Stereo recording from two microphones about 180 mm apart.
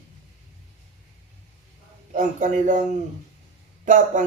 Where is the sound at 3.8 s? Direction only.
45° right (ahead or behind).